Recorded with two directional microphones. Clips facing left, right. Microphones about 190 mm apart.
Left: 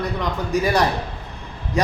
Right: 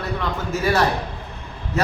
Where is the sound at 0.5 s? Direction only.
15° left (ahead or behind).